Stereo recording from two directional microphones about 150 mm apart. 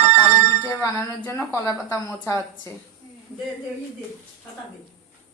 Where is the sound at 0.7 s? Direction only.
20° left (ahead or behind).